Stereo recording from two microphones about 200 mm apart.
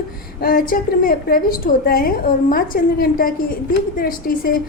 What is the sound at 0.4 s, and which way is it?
A woman's voice, 45° left (ahead or behind).